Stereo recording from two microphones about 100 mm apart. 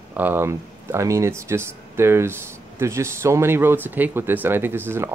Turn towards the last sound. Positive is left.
turn(degrees=-25)  # may be behind; listen again after turning